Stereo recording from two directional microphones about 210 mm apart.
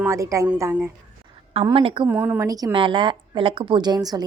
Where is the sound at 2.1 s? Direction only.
10° right (ahead or behind).